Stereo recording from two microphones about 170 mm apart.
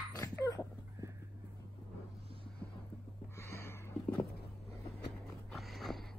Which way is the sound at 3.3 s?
15° left (ahead or behind).